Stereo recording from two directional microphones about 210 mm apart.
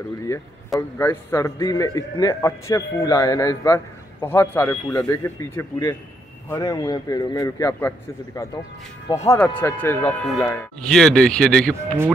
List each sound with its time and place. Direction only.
0.3 s a man's voice: 10° left (ahead or behind)